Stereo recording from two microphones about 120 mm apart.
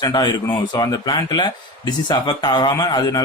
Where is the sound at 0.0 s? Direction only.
35° left (ahead or behind).